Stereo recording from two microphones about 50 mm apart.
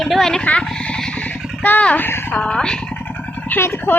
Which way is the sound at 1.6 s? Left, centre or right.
Left.